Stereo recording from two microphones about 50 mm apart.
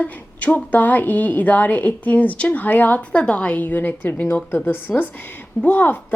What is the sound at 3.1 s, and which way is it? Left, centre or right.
Speech, left.